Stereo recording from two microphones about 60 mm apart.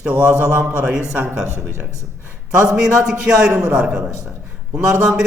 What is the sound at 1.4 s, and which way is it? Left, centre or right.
Speech, right.